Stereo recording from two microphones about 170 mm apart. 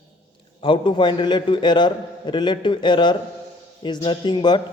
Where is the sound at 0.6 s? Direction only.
30° left (ahead or behind).